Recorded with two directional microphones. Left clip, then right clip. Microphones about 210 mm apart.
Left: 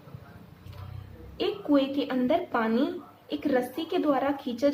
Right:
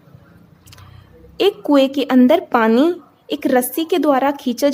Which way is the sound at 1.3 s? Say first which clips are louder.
Right 12 dB; 50° right (ahead or behind).